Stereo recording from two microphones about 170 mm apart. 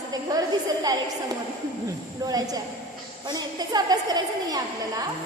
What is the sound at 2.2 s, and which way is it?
A woman's voice, 20° right (ahead or behind).